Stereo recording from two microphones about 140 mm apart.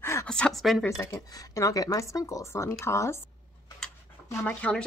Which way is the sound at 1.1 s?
25° left (ahead or behind).